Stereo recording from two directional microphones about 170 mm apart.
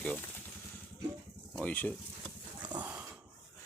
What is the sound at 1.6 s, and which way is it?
Speech, 10° left (ahead or behind).